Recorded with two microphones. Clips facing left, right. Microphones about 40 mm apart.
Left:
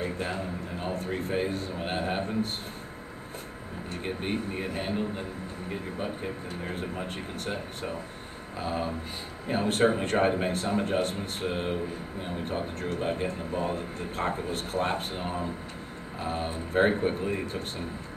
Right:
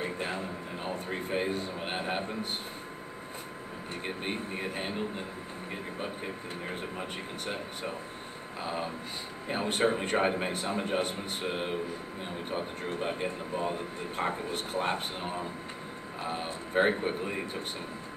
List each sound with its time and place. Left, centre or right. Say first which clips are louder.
0.0 s a sound: left 2 dB; centre
0.9 s speech: left 2 dB; centre
4.0 s speech: left 4 dB; centre